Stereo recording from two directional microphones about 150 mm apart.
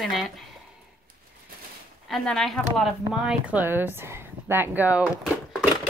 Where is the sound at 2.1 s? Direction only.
5° left (ahead or behind).